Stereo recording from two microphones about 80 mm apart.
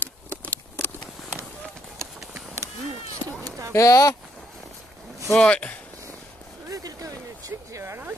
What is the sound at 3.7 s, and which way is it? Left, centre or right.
Speech, left.